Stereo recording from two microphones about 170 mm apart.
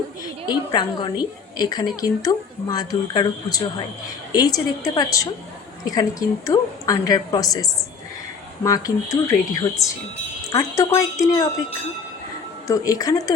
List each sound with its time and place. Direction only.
0.4 s a woman's voice: 25° left (ahead or behind)
12.6 s a woman's voice: 20° left (ahead or behind)